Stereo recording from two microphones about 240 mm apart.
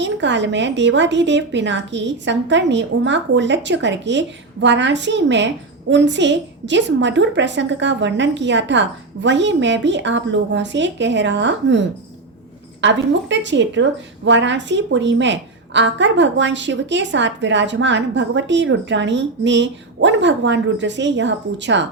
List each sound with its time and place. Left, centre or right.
0.0 s a woman's voice: right